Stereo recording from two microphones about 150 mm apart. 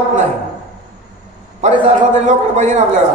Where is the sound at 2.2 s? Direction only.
50° right (ahead or behind).